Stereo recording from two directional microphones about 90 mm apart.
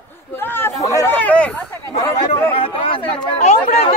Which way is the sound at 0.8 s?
40° left (ahead or behind).